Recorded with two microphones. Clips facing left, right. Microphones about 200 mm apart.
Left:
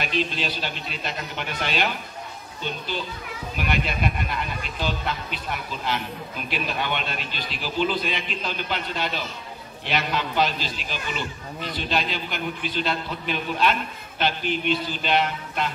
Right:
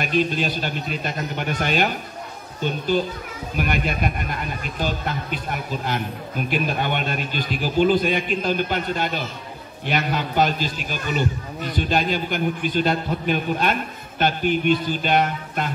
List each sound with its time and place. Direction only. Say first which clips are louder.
0.0 s speech: right 5 dB; 50° right (ahead or behind)